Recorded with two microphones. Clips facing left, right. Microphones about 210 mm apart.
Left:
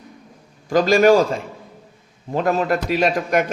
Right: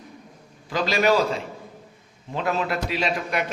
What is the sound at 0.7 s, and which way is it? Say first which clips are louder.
A man's voice: left 8 dB; 45° left (ahead or behind).